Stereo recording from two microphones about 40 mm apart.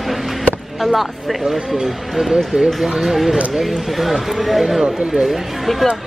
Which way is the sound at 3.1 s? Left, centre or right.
Centre.